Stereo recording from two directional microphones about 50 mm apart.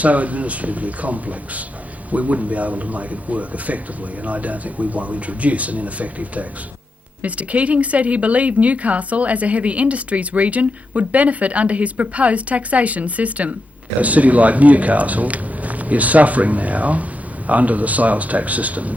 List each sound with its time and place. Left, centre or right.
0.0 s speech: right